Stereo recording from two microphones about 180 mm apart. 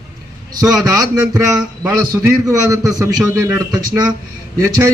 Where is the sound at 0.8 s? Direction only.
20° right (ahead or behind).